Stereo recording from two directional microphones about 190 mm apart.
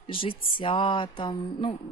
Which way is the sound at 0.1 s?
25° left (ahead or behind).